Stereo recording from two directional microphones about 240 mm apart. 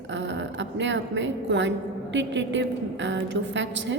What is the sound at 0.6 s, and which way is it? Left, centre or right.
A woman's voice, right.